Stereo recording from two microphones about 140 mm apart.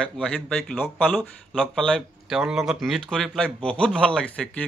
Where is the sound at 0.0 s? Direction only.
5° left (ahead or behind).